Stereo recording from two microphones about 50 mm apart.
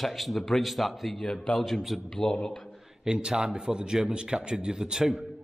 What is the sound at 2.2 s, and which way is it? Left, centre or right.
Speech, left.